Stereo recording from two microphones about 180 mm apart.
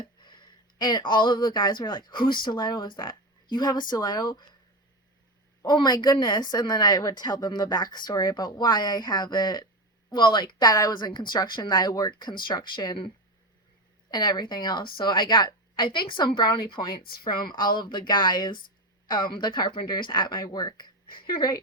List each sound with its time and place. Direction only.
0.0 s speech: 25° left (ahead or behind)
5.6 s a woman's voice: 25° left (ahead or behind)
14.1 s a woman's voice: 25° left (ahead or behind)
16.9 s speech: 55° left (ahead or behind)
17.5 s a woman's voice: 25° left (ahead or behind)